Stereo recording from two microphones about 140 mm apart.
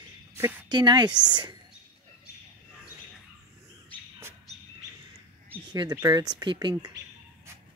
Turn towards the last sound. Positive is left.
turn(degrees=-30)  # may be behind; listen again after turning